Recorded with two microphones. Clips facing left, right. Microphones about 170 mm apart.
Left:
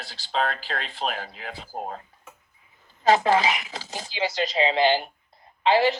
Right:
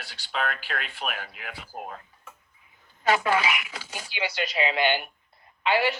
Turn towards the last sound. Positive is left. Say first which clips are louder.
# left 4 dB
turn(degrees=25)  # may be behind; listen again after turning